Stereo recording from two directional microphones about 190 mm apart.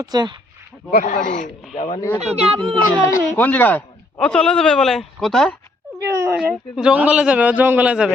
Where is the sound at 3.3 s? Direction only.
10° left (ahead or behind).